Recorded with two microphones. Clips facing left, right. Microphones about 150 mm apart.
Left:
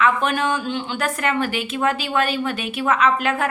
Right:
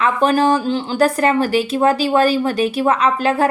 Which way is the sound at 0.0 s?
35° right (ahead or behind).